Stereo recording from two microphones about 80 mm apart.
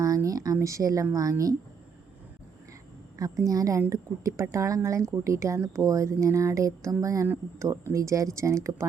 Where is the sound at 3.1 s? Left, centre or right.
Right.